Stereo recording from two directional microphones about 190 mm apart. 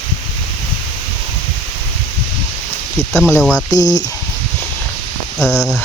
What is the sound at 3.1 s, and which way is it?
Speech, 10° left (ahead or behind).